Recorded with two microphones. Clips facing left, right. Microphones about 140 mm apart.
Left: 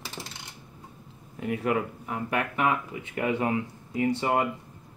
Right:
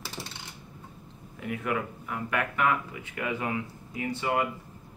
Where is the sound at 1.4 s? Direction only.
35° left (ahead or behind).